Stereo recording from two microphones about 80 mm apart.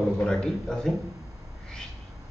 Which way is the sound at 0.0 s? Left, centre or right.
Centre.